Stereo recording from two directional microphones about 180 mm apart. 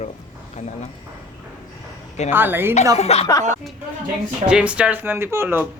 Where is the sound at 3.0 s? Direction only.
35° left (ahead or behind).